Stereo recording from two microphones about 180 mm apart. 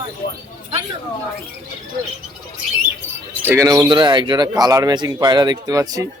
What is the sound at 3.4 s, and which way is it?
Speech, 15° right (ahead or behind).